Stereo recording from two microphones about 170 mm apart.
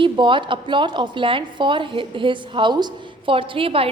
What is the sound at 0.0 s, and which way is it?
A woman's voice, 30° right (ahead or behind).